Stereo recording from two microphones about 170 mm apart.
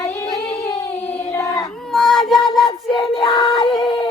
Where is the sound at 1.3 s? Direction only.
20° left (ahead or behind).